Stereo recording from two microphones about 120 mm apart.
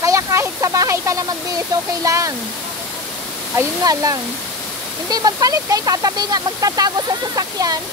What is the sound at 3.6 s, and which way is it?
Speech, 30° right (ahead or behind).